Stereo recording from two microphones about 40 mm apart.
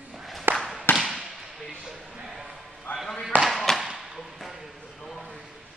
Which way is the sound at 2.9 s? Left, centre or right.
Left.